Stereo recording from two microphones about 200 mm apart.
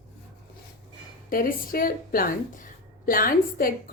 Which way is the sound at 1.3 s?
45° left (ahead or behind).